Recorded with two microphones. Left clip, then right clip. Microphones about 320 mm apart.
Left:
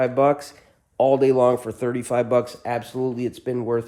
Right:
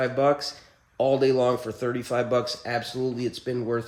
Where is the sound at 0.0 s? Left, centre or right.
Centre.